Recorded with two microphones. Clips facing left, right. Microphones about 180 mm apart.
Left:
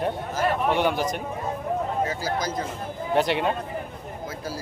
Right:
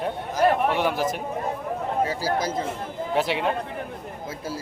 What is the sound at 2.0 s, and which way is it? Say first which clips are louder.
Speech: right 2 dB; 30° right (ahead or behind).